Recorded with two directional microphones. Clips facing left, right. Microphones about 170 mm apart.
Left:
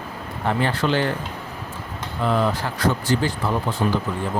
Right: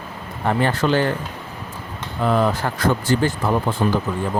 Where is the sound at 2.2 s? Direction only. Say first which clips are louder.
Right 3 dB; 50° right (ahead or behind).